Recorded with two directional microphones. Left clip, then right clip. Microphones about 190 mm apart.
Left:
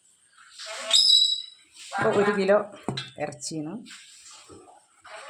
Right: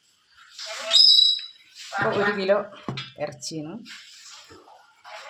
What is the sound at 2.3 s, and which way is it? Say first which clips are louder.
Speech: left 1 dB; 25° left (ahead or behind).